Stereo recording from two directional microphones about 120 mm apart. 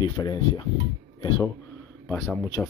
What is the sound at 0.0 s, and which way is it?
Speech, 40° left (ahead or behind).